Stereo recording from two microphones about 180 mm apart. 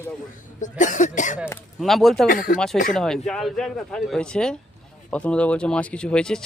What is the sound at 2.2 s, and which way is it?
Speech, 50° left (ahead or behind).